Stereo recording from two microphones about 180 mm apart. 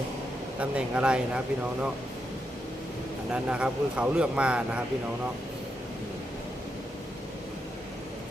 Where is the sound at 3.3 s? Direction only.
5° right (ahead or behind).